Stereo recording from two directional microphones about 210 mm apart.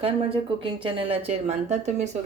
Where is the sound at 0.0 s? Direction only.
25° right (ahead or behind).